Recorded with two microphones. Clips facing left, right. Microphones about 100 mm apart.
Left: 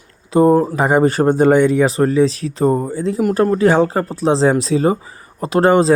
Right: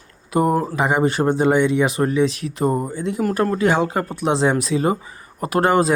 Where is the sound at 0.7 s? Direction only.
40° left (ahead or behind).